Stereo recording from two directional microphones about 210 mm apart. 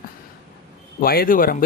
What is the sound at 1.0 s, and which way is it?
Speech, 45° left (ahead or behind).